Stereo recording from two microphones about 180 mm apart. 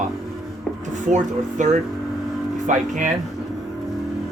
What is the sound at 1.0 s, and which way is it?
Speech, 45° right (ahead or behind).